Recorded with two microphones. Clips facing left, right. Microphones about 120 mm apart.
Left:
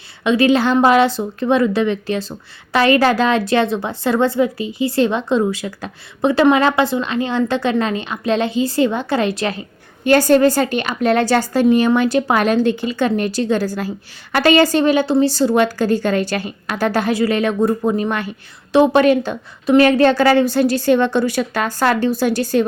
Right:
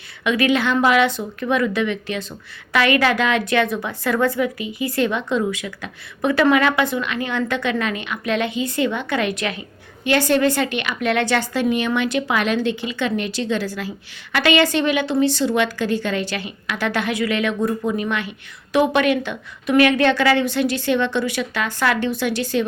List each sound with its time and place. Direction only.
0.3 s a woman's voice: 30° left (ahead or behind)